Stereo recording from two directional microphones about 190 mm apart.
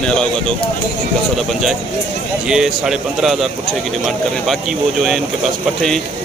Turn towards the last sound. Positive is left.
turn(degrees=0)  # may be behind; listen again after turning